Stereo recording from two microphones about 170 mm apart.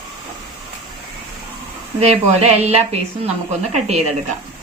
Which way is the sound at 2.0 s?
40° right (ahead or behind).